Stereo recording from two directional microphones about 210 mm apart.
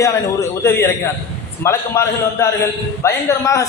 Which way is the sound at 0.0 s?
15° left (ahead or behind).